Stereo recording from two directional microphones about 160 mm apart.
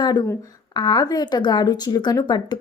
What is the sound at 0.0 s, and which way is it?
A woman's voice, 25° left (ahead or behind).